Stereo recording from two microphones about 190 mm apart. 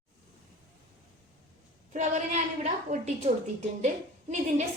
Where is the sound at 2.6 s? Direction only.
35° right (ahead or behind).